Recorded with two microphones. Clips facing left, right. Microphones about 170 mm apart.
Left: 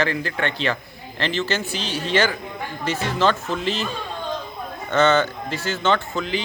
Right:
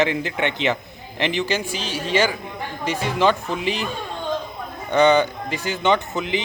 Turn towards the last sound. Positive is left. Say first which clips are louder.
# right 1 dB
turn(degrees=-20)  # may be behind; listen again after turning